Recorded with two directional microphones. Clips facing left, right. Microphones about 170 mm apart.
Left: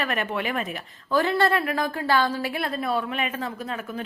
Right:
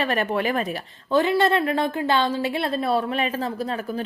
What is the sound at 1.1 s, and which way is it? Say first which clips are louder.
A woman's voice: right 3 dB; 20° right (ahead or behind).